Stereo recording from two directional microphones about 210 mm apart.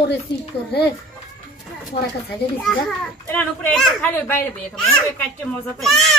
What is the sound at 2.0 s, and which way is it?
Speech, 30° left (ahead or behind).